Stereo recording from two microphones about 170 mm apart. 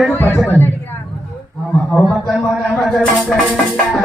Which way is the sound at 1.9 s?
Centre (ahead or behind).